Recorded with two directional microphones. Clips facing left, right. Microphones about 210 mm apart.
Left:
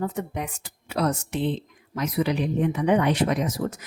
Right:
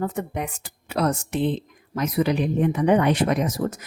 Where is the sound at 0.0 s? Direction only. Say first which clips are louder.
Right 2 dB; 55° right (ahead or behind).